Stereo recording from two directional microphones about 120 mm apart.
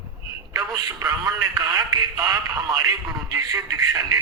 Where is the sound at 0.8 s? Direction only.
30° right (ahead or behind).